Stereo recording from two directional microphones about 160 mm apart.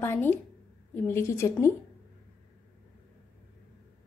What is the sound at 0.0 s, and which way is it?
A woman's voice, 15° left (ahead or behind).